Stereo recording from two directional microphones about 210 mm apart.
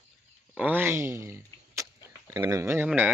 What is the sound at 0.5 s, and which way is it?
Speech, 10° right (ahead or behind).